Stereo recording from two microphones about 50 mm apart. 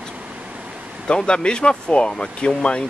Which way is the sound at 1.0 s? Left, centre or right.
Centre.